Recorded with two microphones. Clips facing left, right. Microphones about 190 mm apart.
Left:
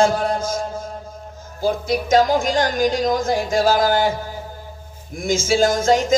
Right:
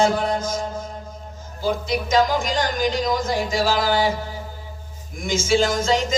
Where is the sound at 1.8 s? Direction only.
50° left (ahead or behind).